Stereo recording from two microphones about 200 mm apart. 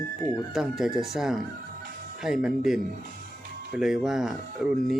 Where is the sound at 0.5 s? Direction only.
Centre (ahead or behind).